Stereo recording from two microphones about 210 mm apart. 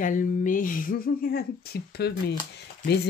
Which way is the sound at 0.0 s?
40° left (ahead or behind).